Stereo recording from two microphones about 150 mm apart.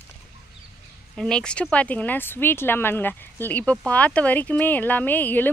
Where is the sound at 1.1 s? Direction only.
5° left (ahead or behind).